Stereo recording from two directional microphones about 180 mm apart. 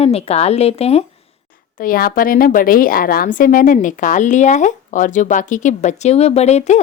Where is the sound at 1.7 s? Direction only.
50° left (ahead or behind).